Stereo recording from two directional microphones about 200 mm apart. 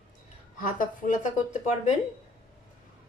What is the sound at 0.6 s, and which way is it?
Speech, 40° left (ahead or behind).